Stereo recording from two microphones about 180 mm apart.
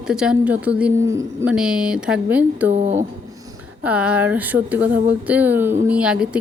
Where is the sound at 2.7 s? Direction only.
40° right (ahead or behind).